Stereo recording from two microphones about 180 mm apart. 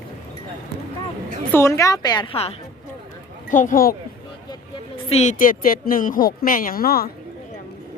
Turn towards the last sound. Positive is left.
turn(degrees=55)  # may be behind; listen again after turning